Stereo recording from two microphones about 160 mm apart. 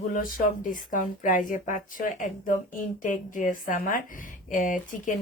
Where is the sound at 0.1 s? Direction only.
60° left (ahead or behind).